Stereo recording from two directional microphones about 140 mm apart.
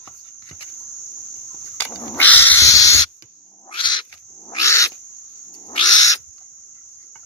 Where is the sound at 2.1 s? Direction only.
10° left (ahead or behind).